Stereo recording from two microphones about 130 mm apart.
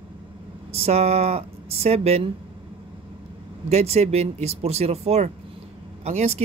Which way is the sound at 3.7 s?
55° right (ahead or behind).